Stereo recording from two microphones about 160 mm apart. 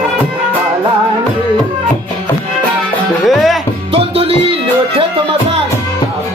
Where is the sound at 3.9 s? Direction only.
35° right (ahead or behind).